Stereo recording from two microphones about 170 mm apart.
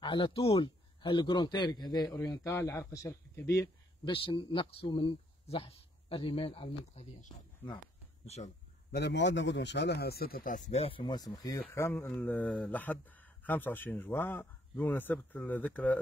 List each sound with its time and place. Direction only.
0.0 s a man's voice: 30° left (ahead or behind)
8.9 s speech: 85° left; by 16.0 s 10° left (ahead or behind)